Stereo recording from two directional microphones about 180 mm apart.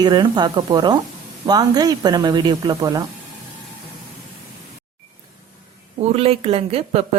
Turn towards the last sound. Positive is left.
turn(degrees=-35)  # may be behind; listen again after turning